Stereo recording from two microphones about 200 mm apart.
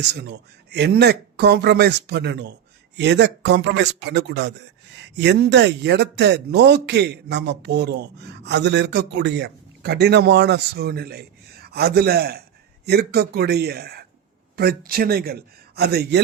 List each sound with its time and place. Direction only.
0.0 s a man's voice: 55° right (ahead or behind)